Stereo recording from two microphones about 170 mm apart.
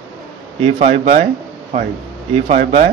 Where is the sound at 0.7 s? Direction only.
45° right (ahead or behind).